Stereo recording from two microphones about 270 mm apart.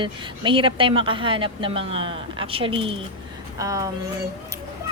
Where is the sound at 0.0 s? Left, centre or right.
Centre.